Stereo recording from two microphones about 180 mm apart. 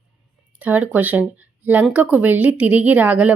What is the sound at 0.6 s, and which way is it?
Speech, 10° right (ahead or behind).